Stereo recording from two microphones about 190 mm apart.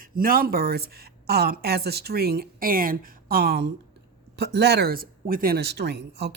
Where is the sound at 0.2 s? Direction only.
50° right (ahead or behind).